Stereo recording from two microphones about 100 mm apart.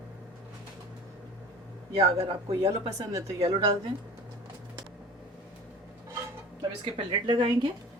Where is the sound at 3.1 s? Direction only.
35° right (ahead or behind).